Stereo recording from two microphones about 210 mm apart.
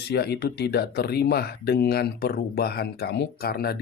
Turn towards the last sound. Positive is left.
turn(degrees=45)  # may be behind; listen again after turning